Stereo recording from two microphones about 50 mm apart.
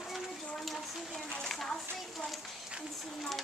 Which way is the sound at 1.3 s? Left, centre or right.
Centre.